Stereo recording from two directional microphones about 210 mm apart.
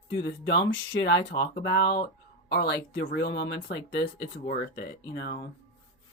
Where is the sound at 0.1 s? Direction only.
55° left (ahead or behind).